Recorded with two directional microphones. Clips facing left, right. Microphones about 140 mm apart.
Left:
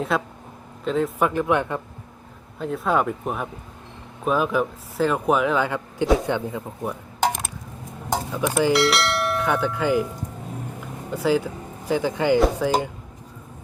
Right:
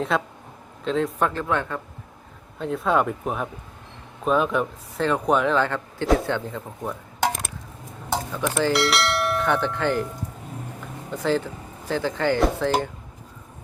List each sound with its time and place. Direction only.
0.1 s speech: centre (ahead or behind)
1.3 s speech: 15° left (ahead or behind)
2.6 s speech: centre (ahead or behind)
8.1 s dishes: 15° left (ahead or behind)
8.4 s bell: 5° left (ahead or behind)
11.2 s speech: 10° left (ahead or behind)